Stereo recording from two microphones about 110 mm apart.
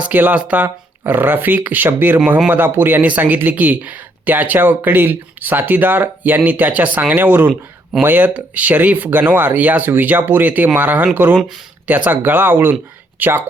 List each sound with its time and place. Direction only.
0.0 s speech: 15° right (ahead or behind)